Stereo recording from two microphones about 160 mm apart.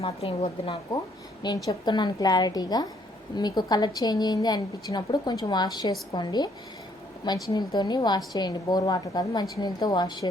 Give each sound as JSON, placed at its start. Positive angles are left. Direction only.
{"t": 0.0, "sound": "a woman's voice", "side_deg": 40}